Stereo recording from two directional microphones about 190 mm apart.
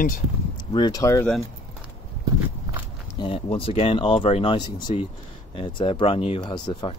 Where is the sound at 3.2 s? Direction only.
30° left (ahead or behind).